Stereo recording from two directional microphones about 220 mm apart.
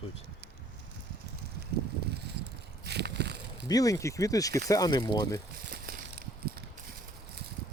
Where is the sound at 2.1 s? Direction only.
50° right (ahead or behind).